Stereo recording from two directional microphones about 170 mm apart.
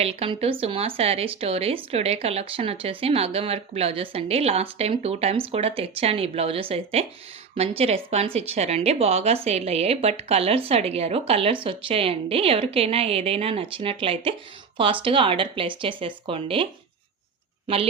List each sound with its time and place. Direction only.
0.0 s speech: 35° right (ahead or behind)